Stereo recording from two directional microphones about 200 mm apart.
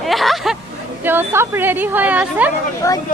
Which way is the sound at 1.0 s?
10° right (ahead or behind).